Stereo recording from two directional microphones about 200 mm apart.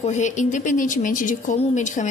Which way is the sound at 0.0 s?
35° left (ahead or behind).